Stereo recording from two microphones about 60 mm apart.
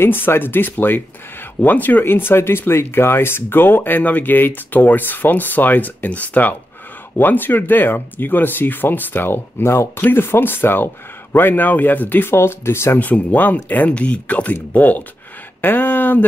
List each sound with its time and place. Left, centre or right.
0.0 s speech: left
13.0 s speech: left